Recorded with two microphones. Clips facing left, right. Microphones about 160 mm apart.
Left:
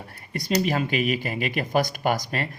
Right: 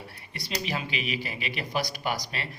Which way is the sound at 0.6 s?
50° left (ahead or behind).